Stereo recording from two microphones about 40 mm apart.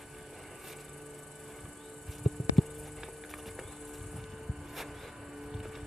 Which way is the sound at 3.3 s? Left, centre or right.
Centre.